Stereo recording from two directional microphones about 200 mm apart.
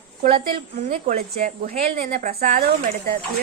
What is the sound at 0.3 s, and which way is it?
A woman's voice, 25° right (ahead or behind).